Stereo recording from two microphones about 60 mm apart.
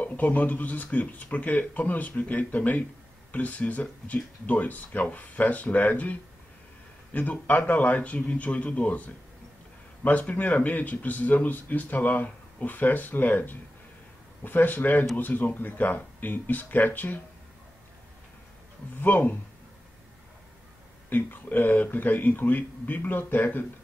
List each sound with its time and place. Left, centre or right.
0.0 s speech: left
7.2 s speech: left
18.9 s speech: left
21.1 s speech: left